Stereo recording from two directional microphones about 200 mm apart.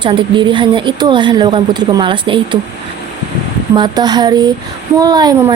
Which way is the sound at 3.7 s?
20° right (ahead or behind).